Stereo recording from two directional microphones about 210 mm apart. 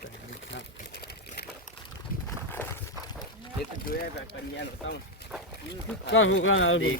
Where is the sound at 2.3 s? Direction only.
10° left (ahead or behind).